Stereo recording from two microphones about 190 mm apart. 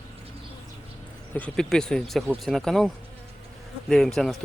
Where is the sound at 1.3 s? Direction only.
5° left (ahead or behind).